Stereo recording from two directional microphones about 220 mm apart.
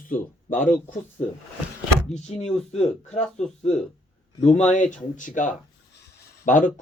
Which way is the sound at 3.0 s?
30° left (ahead or behind).